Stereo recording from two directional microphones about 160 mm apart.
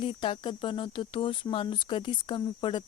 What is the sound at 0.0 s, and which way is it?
Speech, 30° left (ahead or behind).